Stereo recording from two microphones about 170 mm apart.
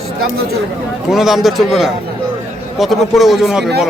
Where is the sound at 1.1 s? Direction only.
Centre (ahead or behind).